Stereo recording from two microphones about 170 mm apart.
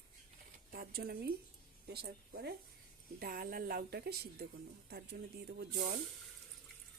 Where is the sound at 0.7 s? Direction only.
65° right (ahead or behind).